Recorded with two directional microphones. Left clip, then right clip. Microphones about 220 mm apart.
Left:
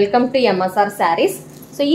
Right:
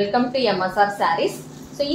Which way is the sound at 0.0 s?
50° left (ahead or behind).